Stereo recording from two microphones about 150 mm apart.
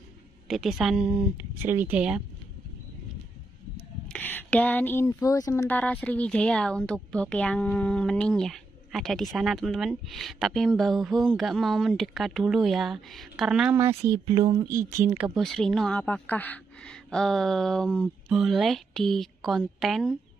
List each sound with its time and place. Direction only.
0.5 s speech: centre (ahead or behind)
4.1 s speech: 10° left (ahead or behind); by 13.7 s 5° right (ahead or behind)
13.7 s speech: 15° right (ahead or behind)
14.2 s speech: 30° right (ahead or behind)
15.0 s speech: 5° right (ahead or behind)